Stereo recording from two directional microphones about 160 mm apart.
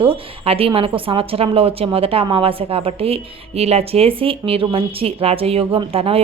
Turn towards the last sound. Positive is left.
turn(degrees=-35)  # may be behind; listen again after turning